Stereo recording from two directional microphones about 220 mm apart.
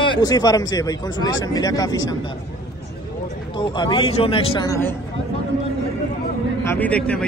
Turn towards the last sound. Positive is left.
turn(degrees=5)  # may be behind; listen again after turning